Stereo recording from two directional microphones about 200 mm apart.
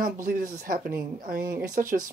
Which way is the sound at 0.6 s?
45° right (ahead or behind).